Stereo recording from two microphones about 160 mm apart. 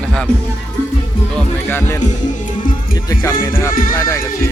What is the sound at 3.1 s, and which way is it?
Speech, 15° left (ahead or behind).